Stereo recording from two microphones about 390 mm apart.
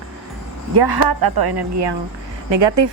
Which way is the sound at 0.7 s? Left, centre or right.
Right.